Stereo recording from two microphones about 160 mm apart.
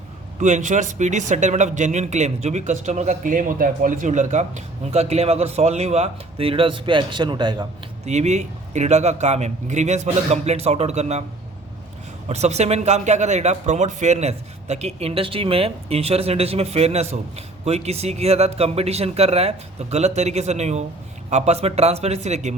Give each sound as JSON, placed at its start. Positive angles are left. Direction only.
{"t": 0.3, "sound": "a man's voice", "side_deg": -50}
{"t": 8.0, "sound": "a man's voice", "side_deg": -45}
{"t": 12.3, "sound": "a man's voice", "side_deg": -45}